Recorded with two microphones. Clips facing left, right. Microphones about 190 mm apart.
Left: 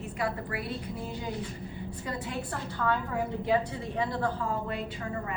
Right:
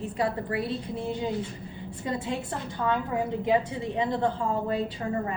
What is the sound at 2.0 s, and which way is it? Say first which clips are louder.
A woman's voice: right 5 dB; 25° right (ahead or behind).